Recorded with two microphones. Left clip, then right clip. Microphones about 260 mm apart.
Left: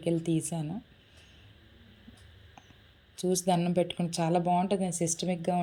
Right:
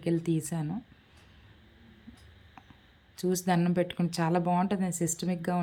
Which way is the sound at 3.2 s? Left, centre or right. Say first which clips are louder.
Left 1 dB; centre.